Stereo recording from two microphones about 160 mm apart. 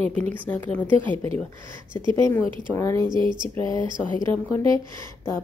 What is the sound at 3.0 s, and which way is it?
Speech, 30° right (ahead or behind).